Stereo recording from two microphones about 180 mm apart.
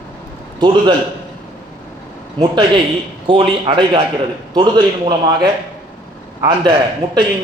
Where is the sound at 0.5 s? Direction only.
25° right (ahead or behind).